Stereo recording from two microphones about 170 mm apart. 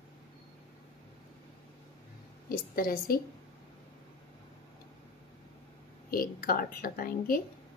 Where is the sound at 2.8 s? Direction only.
60° left (ahead or behind).